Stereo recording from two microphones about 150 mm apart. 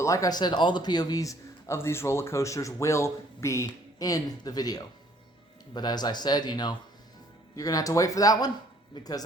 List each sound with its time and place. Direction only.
0.0 s a man's voice: 20° left (ahead or behind)